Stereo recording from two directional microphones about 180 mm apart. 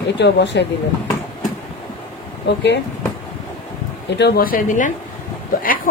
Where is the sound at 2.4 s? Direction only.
75° left (ahead or behind).